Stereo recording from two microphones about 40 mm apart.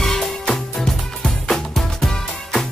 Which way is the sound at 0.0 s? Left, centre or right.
Centre.